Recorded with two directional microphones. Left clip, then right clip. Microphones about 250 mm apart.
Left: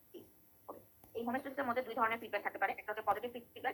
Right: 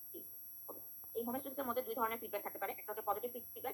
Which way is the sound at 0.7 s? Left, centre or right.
Centre.